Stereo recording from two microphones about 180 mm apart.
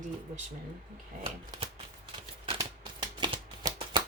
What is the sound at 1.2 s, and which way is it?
Speech, 30° right (ahead or behind).